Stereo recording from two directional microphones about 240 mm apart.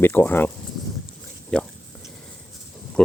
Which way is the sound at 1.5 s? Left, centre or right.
Centre.